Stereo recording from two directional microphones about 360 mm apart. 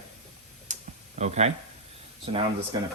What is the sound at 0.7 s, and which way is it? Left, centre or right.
Clicking, centre.